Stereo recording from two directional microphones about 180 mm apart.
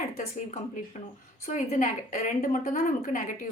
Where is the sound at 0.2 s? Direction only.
45° left (ahead or behind).